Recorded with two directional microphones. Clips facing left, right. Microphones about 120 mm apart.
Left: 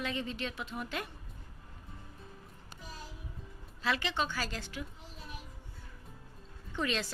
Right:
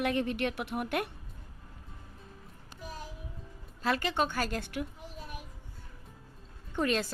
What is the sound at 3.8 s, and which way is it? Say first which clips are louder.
A woman's voice: right 4 dB; 45° right (ahead or behind).